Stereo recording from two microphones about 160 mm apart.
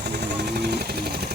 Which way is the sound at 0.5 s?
85° right.